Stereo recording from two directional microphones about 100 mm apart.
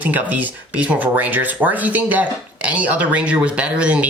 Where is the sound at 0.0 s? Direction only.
15° right (ahead or behind).